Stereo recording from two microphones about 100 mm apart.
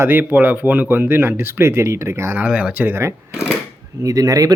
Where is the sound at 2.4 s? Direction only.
15° right (ahead or behind).